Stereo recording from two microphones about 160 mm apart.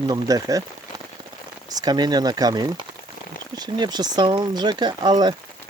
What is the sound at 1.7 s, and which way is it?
Speech, 25° right (ahead or behind).